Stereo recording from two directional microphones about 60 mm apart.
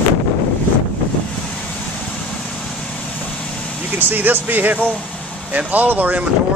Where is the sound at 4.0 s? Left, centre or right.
Right.